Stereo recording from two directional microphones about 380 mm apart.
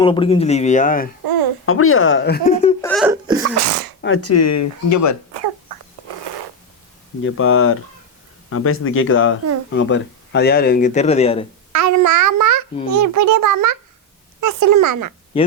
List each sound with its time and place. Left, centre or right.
0.0 s speech: centre
1.6 s speech: left
2.8 s hiccup: centre
3.4 s speech: right
4.0 s speech: left
7.2 s speech: left; by 11.4 s centre
11.7 s a child's voice: right
15.3 s speech: centre